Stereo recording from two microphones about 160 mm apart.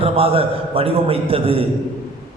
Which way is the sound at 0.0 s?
35° right (ahead or behind).